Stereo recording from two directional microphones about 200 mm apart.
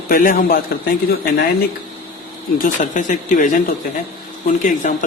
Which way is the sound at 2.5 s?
40° left (ahead or behind).